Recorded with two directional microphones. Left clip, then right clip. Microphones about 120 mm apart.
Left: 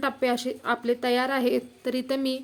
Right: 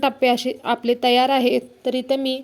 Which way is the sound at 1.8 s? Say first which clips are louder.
Right 6 dB; 40° left (ahead or behind).